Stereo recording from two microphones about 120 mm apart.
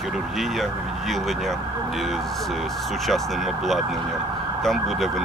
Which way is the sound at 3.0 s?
Centre (ahead or behind).